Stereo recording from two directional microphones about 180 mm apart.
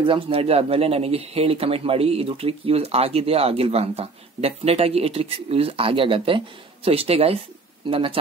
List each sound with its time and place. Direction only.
0.0 s speech: 30° right (ahead or behind)